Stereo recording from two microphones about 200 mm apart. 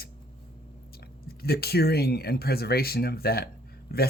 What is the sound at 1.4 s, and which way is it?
A woman's voice, 50° left (ahead or behind).